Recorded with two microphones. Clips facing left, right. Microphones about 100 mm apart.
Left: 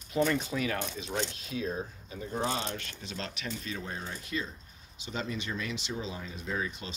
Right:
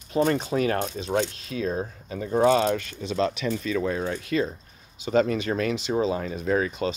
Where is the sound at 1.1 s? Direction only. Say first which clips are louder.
Right 9 dB; 85° right.